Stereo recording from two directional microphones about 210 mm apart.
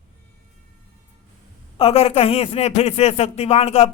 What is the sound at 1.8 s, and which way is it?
Speech, 30° left (ahead or behind).